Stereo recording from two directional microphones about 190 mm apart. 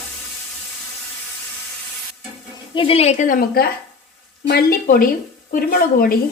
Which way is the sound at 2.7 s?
30° left (ahead or behind).